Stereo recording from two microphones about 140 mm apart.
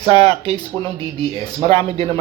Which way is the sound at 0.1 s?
45° right (ahead or behind).